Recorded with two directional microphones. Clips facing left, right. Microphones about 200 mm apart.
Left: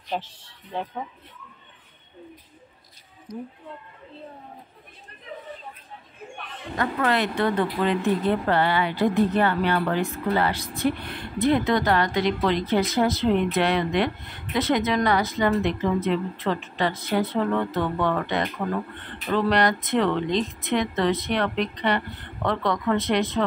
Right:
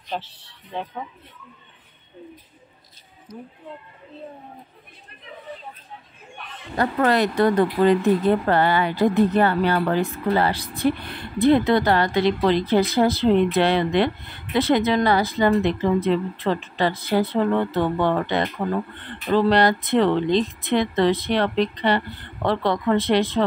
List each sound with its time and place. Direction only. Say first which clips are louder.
0.1 s speech: even; 10° left (ahead or behind)
6.8 s speech: right 4 dB; 40° right (ahead or behind)